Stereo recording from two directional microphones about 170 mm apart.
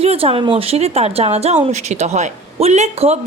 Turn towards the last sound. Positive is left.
turn(degrees=-40)  # may be behind; listen again after turning